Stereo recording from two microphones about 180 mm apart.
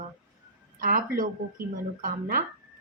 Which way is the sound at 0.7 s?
50° right (ahead or behind).